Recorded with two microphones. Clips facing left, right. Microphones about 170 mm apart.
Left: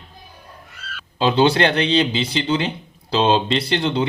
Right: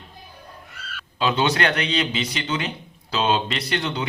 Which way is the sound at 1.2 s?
30° left (ahead or behind).